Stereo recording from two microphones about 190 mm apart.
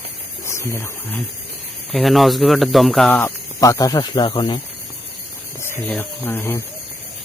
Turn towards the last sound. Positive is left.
turn(degrees=10)  # may be behind; listen again after turning